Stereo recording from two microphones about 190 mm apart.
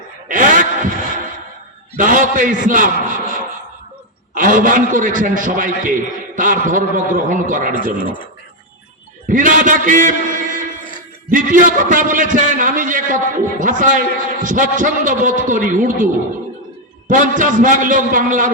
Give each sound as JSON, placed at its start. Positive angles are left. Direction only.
{"t": 0.3, "sound": "a sound", "side_deg": -45}
{"t": 2.0, "sound": "a man's voice", "side_deg": -45}
{"t": 4.4, "sound": "a man's voice", "side_deg": -45}
{"t": 9.2, "sound": "a man's voice", "side_deg": -45}
{"t": 17.1, "sound": "a man's voice", "side_deg": -45}